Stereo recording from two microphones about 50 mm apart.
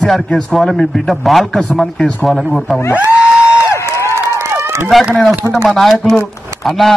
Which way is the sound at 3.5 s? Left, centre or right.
Left.